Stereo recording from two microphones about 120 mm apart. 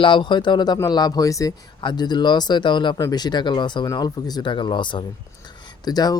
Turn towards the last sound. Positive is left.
turn(degrees=35)  # may be behind; listen again after turning